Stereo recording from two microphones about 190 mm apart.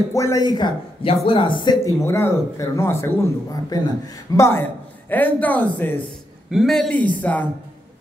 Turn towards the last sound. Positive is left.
turn(degrees=10)  # may be behind; listen again after turning